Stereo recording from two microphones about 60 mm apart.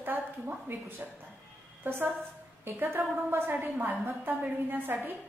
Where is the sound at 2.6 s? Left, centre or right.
Right.